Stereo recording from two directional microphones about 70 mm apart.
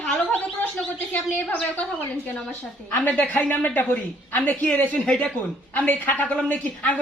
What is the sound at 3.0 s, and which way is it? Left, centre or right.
A woman's voice, left.